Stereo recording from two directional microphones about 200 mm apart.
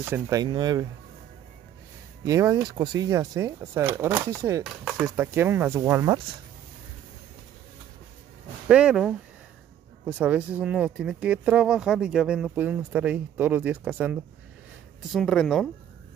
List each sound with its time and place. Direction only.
0.0 s speech: 15° right (ahead or behind)
2.2 s speech: 15° right (ahead or behind)
8.6 s speech: 5° right (ahead or behind)